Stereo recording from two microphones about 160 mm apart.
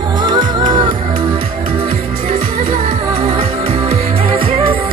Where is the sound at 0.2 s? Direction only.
30° right (ahead or behind).